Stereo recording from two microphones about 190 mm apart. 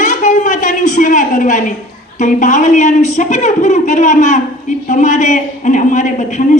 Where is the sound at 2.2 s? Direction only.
40° left (ahead or behind).